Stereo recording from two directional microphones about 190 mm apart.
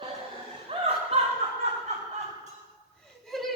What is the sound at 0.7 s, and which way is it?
Music, 30° right (ahead or behind).